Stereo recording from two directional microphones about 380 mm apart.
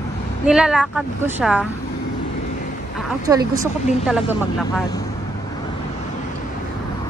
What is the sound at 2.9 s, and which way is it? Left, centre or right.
Speech, centre.